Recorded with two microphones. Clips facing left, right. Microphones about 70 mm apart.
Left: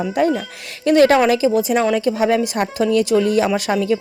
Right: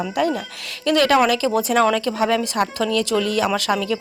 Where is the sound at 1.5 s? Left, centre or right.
Centre.